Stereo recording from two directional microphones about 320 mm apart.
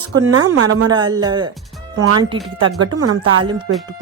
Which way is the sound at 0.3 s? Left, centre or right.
Right.